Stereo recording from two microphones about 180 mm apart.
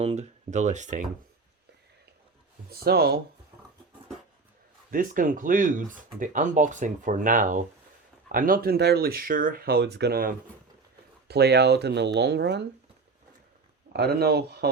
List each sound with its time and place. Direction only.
0.0 s speech: 35° right (ahead or behind)
2.6 s speech: 60° right (ahead or behind)
4.9 s speech: 50° right (ahead or behind); by 12.6 s 70° right (ahead or behind)
13.9 s speech: 65° right (ahead or behind)